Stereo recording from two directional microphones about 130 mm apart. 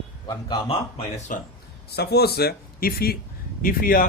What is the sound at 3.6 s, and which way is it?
Speech, 90° left.